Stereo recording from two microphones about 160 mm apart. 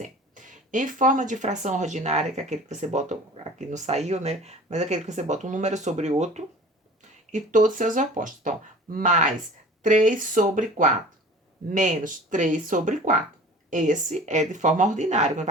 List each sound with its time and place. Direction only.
0.0 s speech: 55° right (ahead or behind)